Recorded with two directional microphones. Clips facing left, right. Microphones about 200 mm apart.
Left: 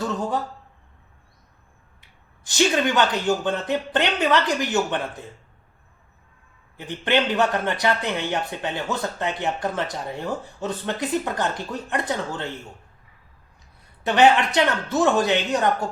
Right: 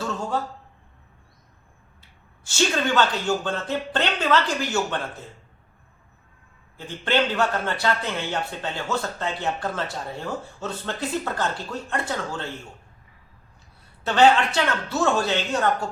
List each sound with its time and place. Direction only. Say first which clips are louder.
0.2 s speech: left 2 dB; 15° left (ahead or behind)
2.0 s a man's voice: right 1 dB; 15° left (ahead or behind)
6.7 s a man's voice: left 1 dB; 15° left (ahead or behind)
14.0 s a man's voice: left 1 dB; 15° left (ahead or behind)